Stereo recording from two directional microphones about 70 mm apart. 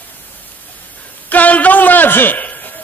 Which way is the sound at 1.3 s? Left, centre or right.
Left.